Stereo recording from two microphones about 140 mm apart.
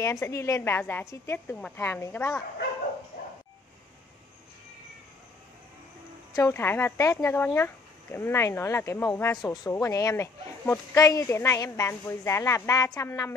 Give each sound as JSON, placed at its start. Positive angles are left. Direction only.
{"t": 0.0, "sound": "a woman's voice", "side_deg": 20}
{"t": 6.3, "sound": "a woman's voice", "side_deg": 20}